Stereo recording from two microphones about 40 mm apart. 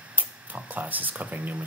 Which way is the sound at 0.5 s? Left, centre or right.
Right.